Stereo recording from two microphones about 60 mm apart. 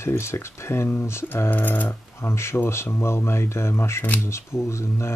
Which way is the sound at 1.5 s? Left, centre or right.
Left.